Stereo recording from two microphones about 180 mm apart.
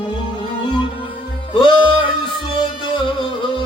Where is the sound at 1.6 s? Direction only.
25° left (ahead or behind).